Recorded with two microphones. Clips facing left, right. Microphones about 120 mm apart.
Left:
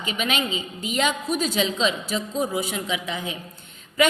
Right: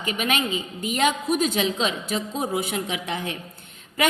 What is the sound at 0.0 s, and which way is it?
A woman's voice, 50° right (ahead or behind).